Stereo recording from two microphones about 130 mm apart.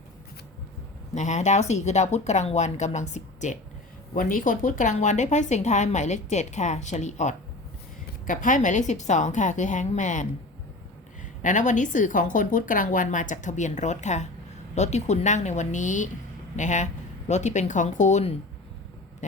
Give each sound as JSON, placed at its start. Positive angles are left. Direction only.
{"t": 1.1, "sound": "a woman's voice", "side_deg": 65}
{"t": 4.1, "sound": "a woman's voice", "side_deg": 90}
{"t": 8.3, "sound": "a woman's voice", "side_deg": 90}